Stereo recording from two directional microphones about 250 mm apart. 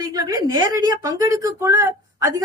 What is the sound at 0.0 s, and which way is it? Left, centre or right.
A woman's voice, centre.